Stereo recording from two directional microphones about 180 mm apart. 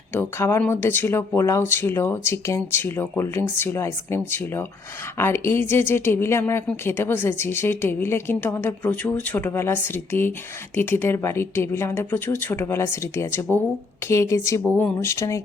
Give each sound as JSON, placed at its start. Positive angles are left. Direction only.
{"t": 0.1, "sound": "a woman's voice", "side_deg": 10}